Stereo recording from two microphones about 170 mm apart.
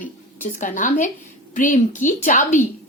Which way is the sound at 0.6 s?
50° left (ahead or behind).